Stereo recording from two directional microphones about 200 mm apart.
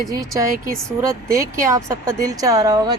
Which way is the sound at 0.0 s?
15° right (ahead or behind).